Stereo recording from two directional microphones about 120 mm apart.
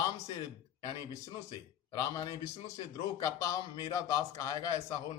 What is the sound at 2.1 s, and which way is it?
Speech, 30° left (ahead or behind).